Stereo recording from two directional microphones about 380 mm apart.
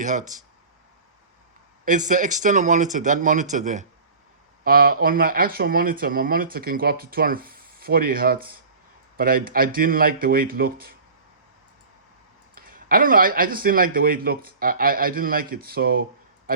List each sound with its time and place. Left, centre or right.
0.0 s speech: centre
1.8 s speech: centre
12.5 s speech: right